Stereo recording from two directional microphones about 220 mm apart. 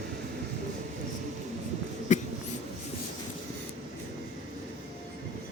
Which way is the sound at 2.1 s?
35° left (ahead or behind).